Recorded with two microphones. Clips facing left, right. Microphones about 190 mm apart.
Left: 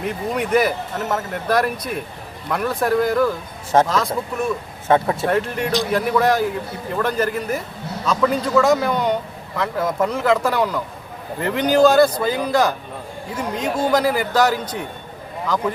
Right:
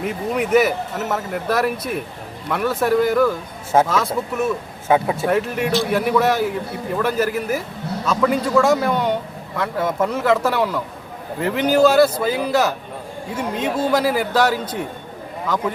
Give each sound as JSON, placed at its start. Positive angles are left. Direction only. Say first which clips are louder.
{"t": 0.0, "sound": "a man's voice", "louder": "right 1 dB", "side_deg": -5}